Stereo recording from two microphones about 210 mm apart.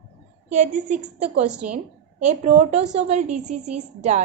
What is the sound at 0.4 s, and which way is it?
Speech, 35° right (ahead or behind).